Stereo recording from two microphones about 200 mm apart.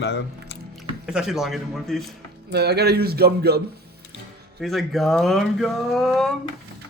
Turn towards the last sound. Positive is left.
turn(degrees=0)  # may be behind; listen again after turning